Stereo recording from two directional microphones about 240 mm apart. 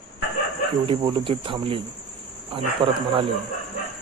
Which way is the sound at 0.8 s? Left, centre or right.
Right.